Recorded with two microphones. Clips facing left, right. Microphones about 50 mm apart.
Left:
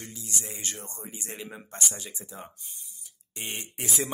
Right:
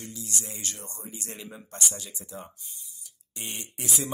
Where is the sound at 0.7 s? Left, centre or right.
Left.